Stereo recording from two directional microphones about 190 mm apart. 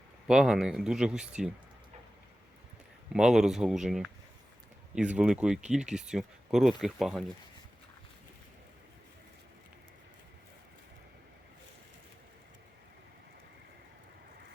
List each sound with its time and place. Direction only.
0.3 s speech: centre (ahead or behind)
3.1 s speech: 5° right (ahead or behind)